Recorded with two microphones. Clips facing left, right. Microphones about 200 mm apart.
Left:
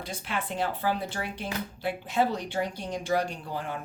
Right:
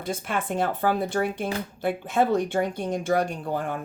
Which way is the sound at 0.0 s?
50° right (ahead or behind).